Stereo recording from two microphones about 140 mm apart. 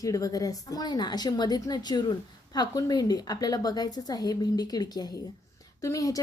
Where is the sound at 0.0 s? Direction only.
25° left (ahead or behind).